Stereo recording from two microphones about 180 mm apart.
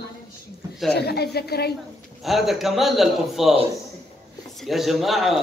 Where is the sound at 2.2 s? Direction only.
Centre (ahead or behind).